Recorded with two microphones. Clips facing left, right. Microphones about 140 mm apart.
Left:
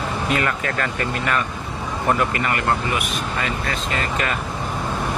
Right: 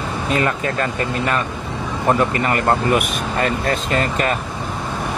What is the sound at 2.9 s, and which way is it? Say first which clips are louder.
Speech: right 6 dB; 45° right (ahead or behind).